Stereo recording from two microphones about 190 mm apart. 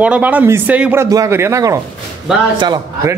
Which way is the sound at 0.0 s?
10° right (ahead or behind).